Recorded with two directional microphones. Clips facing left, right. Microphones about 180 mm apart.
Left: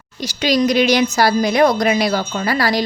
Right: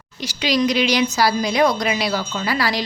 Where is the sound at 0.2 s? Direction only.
40° left (ahead or behind).